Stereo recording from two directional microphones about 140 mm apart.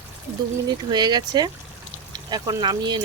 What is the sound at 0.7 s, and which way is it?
Speech, 30° right (ahead or behind).